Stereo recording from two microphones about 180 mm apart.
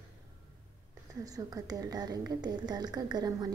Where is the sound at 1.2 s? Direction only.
20° right (ahead or behind).